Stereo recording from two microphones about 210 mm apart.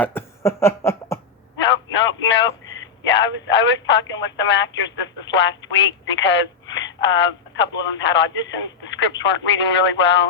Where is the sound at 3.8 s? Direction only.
60° left (ahead or behind).